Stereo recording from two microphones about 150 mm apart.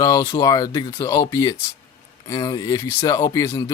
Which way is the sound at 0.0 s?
20° left (ahead or behind).